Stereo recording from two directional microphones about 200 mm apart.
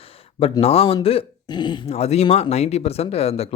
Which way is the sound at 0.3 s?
30° left (ahead or behind).